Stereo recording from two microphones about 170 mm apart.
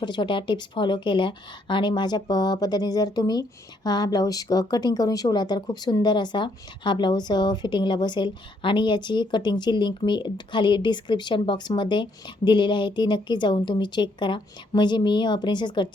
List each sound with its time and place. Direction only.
0.0 s a woman's voice: 25° left (ahead or behind)